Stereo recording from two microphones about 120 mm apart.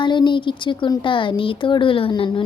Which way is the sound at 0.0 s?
40° left (ahead or behind).